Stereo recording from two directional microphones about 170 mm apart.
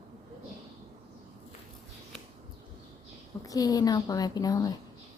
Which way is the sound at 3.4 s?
20° left (ahead or behind).